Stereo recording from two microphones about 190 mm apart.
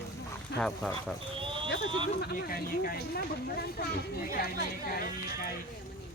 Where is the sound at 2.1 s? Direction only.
55° left (ahead or behind).